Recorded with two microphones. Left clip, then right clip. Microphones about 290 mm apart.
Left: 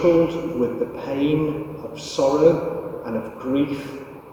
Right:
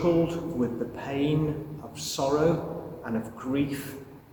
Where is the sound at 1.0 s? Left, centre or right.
Right.